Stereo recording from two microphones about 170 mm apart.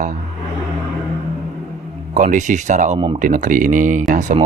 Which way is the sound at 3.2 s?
50° right (ahead or behind).